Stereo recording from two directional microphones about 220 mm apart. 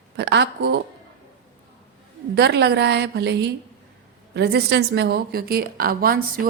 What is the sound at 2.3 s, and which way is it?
A woman's voice, 50° right (ahead or behind).